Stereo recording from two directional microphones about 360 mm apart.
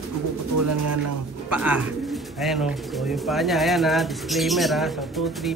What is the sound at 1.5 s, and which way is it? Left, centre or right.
Speech, centre.